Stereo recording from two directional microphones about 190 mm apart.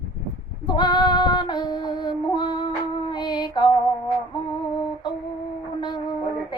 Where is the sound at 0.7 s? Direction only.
20° left (ahead or behind).